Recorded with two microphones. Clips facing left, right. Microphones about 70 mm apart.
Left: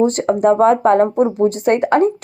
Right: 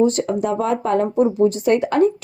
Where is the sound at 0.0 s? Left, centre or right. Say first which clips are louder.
Left 4 dB; left.